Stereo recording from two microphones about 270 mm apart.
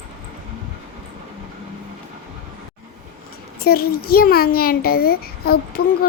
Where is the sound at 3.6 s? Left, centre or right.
Left.